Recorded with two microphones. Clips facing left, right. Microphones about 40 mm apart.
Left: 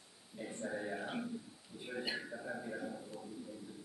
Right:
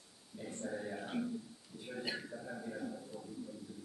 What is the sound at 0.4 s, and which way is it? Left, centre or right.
A man's voice, centre.